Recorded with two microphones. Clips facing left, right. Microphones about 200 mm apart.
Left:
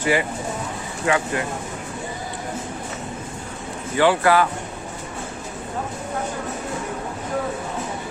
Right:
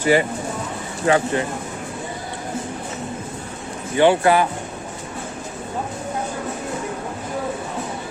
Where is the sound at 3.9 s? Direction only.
20° right (ahead or behind).